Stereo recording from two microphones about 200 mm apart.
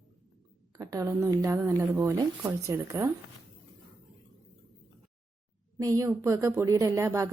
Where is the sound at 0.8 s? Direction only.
15° right (ahead or behind).